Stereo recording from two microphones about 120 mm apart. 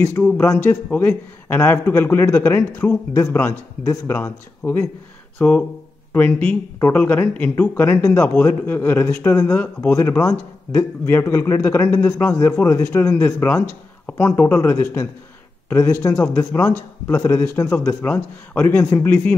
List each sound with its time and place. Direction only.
0.2 s a man's voice: 10° left (ahead or behind)